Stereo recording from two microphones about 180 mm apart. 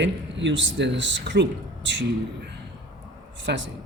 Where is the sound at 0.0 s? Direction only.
85° right.